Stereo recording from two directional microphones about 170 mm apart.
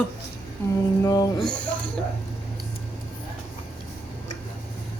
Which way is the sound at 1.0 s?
20° left (ahead or behind).